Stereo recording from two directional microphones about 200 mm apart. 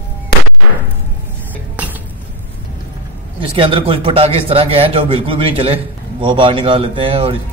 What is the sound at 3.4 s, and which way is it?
Speech, 25° right (ahead or behind).